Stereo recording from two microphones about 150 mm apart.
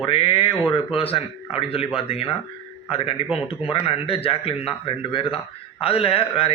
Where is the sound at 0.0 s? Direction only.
35° left (ahead or behind).